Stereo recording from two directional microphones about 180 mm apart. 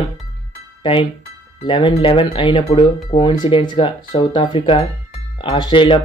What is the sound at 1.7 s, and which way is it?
Speech, 25° left (ahead or behind).